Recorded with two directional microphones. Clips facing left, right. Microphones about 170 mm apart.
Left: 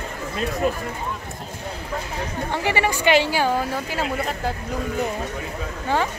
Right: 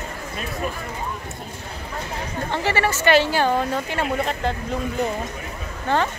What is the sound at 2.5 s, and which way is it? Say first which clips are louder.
A woman's voice: right 1 dB; 10° left (ahead or behind).